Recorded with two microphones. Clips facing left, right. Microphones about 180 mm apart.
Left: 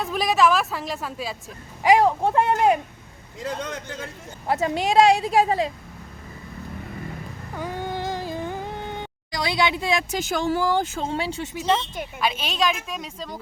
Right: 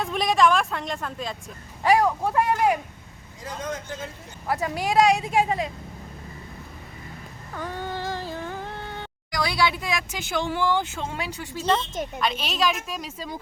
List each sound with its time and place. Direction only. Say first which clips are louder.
0.0 s a woman's voice: left 1 dB; centre (ahead or behind)
1.8 s a woman's voice: left 3 dB; 15° left (ahead or behind)
3.4 s speech: left 2 dB; 75° left (ahead or behind)
4.4 s a woman's voice: left 3 dB; 25° left (ahead or behind)
7.5 s a sound: left 2 dB; 10° left (ahead or behind); by 11.4 s 30° left (ahead or behind)
12.2 s a woman's voice: left 2 dB; centre (ahead or behind)